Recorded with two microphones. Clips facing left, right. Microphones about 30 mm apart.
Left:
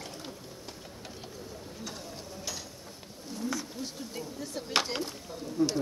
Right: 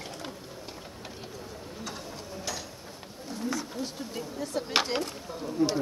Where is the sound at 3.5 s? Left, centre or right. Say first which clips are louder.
Right 3 dB; centre.